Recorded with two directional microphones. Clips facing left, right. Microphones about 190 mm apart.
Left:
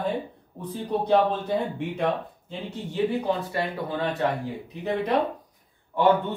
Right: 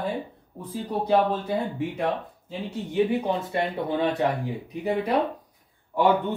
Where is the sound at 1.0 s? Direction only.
5° right (ahead or behind).